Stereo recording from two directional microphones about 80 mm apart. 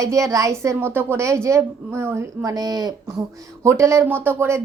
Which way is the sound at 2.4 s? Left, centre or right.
Right.